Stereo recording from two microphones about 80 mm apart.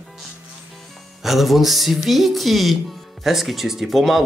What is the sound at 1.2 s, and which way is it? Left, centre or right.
Speech, centre.